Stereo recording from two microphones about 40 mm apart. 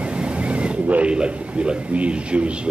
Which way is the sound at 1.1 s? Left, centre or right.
Right.